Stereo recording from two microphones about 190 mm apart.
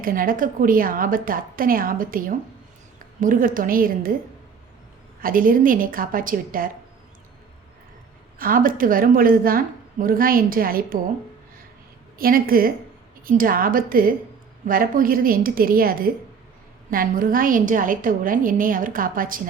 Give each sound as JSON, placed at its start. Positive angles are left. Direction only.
{"t": 0.0, "sound": "a woman's voice", "side_deg": -45}
{"t": 5.2, "sound": "a woman's voice", "side_deg": -45}
{"t": 8.4, "sound": "a woman's voice", "side_deg": -50}
{"t": 12.2, "sound": "a woman's voice", "side_deg": -50}